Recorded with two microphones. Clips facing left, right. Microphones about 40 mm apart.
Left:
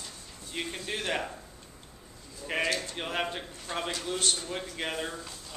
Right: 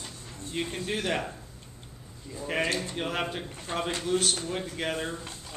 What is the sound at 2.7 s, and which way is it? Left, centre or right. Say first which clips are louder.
Speech: right 1 dB; centre.